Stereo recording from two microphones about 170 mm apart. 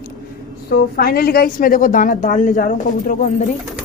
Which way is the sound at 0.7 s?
65° left (ahead or behind).